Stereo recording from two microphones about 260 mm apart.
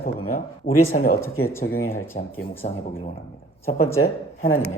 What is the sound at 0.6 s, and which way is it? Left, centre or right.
A man's voice, left.